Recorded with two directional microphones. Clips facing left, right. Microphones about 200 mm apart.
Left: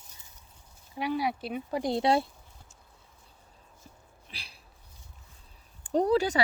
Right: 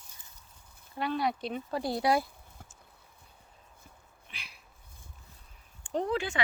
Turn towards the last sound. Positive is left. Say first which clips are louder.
# left 6 dB
turn(degrees=40)  # may be behind; listen again after turning